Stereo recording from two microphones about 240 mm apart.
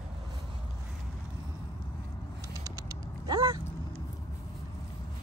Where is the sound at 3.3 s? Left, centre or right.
Right.